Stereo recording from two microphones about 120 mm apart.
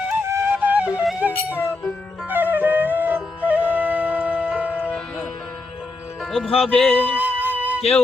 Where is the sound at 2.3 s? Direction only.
15° right (ahead or behind).